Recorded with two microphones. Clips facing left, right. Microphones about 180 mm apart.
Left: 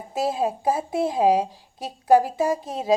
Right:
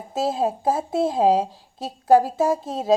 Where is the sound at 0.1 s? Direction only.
15° left (ahead or behind).